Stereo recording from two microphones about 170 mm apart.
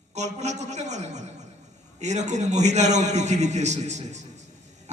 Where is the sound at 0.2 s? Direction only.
40° right (ahead or behind).